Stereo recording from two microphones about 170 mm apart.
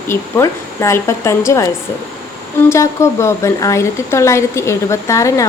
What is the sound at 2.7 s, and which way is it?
A woman's voice, 15° left (ahead or behind).